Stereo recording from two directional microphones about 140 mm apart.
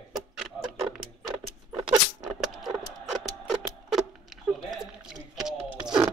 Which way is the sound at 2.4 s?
Centre (ahead or behind).